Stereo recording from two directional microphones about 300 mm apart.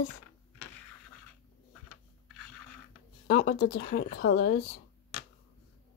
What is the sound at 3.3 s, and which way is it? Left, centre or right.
Speech, left.